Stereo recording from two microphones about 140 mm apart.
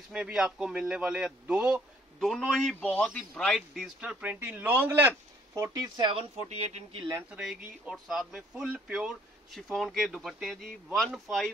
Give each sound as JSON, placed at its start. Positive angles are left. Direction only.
{"t": 0.1, "sound": "speech", "side_deg": -5}
{"t": 3.2, "sound": "a man's voice", "side_deg": 0}
{"t": 6.5, "sound": "speech", "side_deg": -50}
{"t": 7.2, "sound": "speech", "side_deg": -5}